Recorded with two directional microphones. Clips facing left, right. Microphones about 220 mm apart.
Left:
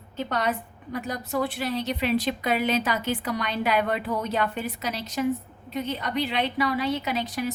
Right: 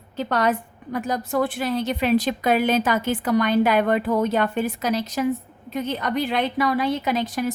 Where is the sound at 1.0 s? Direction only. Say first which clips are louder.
Right 5 dB; 50° right (ahead or behind).